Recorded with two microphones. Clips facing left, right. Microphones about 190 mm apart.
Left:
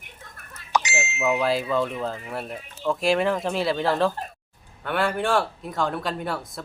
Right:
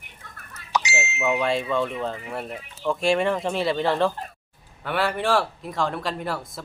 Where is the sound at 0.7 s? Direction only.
50° left (ahead or behind).